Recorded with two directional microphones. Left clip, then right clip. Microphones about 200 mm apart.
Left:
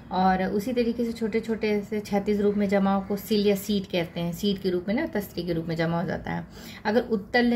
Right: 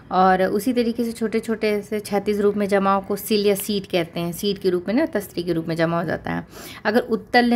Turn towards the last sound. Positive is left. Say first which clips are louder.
# right 5 dB
turn(degrees=-40)  # may be behind; listen again after turning